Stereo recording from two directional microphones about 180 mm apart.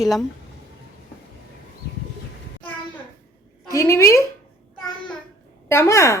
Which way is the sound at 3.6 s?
15° left (ahead or behind).